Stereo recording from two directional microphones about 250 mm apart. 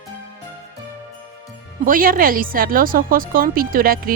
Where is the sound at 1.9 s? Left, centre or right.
Right.